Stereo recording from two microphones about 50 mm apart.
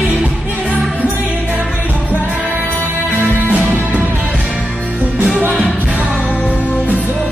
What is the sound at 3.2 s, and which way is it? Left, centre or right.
Music, right.